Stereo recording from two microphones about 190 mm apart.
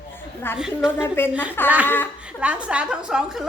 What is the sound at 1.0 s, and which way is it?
A woman's voice, 10° left (ahead or behind).